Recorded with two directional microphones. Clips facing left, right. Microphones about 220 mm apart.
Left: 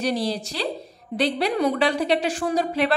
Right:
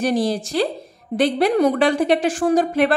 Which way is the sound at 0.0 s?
50° right (ahead or behind).